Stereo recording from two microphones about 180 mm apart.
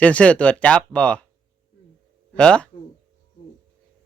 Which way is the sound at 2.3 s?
5° left (ahead or behind).